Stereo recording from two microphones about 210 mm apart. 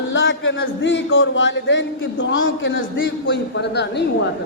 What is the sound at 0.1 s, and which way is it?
A man's voice, 65° left (ahead or behind).